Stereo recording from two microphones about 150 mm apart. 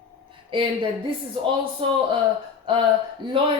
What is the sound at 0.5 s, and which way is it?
Speech, 35° right (ahead or behind).